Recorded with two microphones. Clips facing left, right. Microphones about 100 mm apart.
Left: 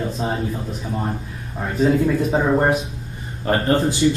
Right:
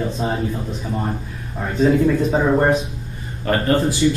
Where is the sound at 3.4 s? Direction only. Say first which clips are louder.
Even; 20° left (ahead or behind).